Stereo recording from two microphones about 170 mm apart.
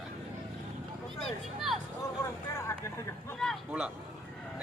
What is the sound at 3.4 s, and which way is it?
Speech, 5° left (ahead or behind).